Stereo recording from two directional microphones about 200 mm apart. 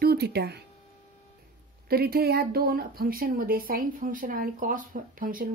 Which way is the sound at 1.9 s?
50° right (ahead or behind).